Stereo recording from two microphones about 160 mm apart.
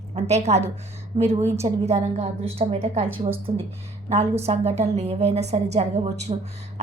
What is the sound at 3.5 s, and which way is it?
Speech, 60° right (ahead or behind).